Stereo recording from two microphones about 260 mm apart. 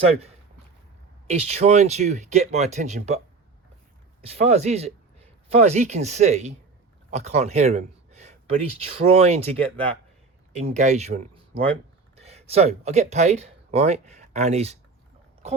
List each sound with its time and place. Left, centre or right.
1.3 s speech: right
4.4 s speech: right
10.5 s speech: right